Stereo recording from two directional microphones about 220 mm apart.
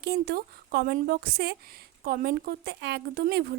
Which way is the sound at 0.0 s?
45° right (ahead or behind).